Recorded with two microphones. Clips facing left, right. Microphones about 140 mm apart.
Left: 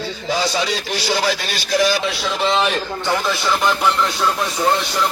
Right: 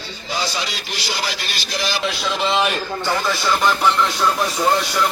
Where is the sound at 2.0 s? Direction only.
Centre (ahead or behind).